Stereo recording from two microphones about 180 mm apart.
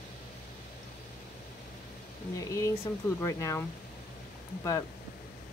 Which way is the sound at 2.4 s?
15° left (ahead or behind).